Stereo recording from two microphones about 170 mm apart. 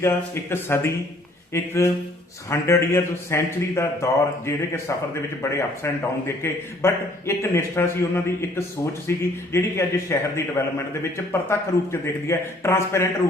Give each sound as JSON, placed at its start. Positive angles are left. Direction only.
{"t": 0.0, "sound": "a man's voice", "side_deg": 15}